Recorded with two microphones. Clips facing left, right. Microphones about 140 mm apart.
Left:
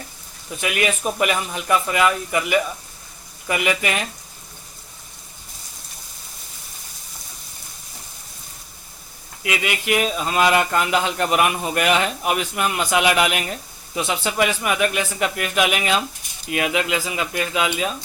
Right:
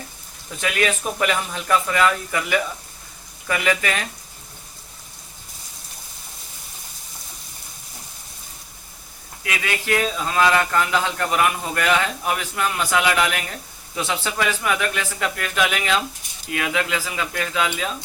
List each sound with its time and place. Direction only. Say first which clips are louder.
0.6 s speech: even; 15° left (ahead or behind)
9.4 s speech: left 3 dB; 15° left (ahead or behind)